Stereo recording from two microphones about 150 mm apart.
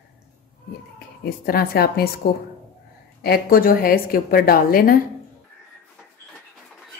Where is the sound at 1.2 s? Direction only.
85° left.